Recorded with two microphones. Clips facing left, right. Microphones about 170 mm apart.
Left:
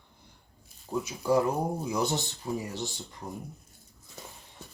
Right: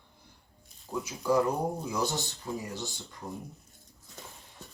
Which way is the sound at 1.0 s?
20° left (ahead or behind).